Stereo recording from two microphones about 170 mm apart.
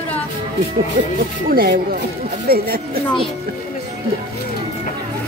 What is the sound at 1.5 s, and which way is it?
Speech, 60° right (ahead or behind).